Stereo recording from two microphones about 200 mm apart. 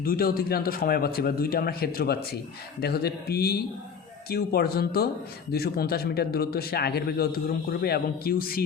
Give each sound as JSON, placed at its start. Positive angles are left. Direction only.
{"t": 0.0, "sound": "a man's voice", "side_deg": 45}